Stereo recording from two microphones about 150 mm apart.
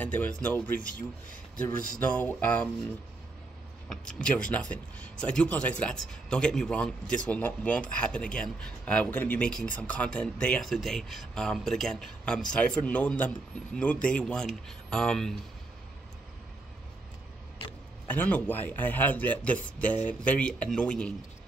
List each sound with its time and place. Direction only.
0.0 s speech: 10° left (ahead or behind)
0.7 s speech: 65° left (ahead or behind)
2.0 s speech: 10° left (ahead or behind)
3.9 s speech: 5° left (ahead or behind)
18.0 s speech: 10° left (ahead or behind)